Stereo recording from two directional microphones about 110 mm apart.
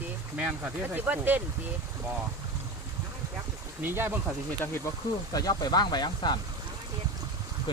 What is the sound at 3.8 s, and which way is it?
Speech, 20° right (ahead or behind).